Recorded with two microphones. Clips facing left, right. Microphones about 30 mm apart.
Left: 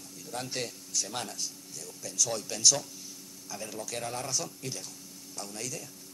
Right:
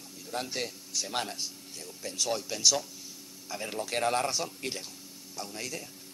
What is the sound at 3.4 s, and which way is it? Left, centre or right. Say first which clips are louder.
Speech: right 3 dB; right.